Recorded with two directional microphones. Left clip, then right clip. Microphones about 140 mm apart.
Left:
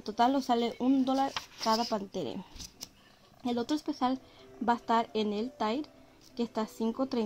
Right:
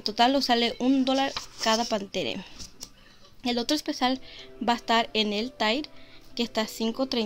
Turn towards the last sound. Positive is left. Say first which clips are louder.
# right 4 dB
turn(degrees=0)  # may be behind; listen again after turning